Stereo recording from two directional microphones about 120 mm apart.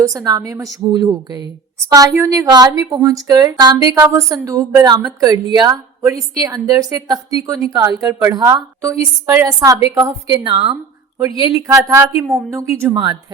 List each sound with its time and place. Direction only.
0.0 s a woman's voice: 30° right (ahead or behind)
11.2 s a woman's voice: 30° right (ahead or behind)